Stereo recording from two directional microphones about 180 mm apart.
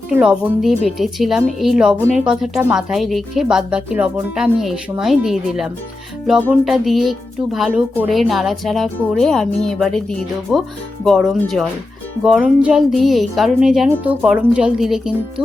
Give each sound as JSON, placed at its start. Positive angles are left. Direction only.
{"t": 0.1, "sound": "speech", "side_deg": -5}